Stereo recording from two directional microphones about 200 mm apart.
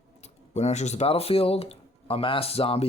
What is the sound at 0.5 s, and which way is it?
Speech, 35° left (ahead or behind).